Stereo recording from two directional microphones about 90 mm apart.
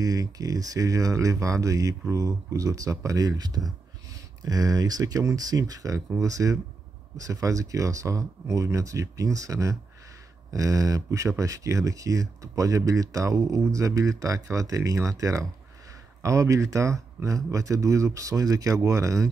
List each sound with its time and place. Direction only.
0.0 s speech: 40° right (ahead or behind)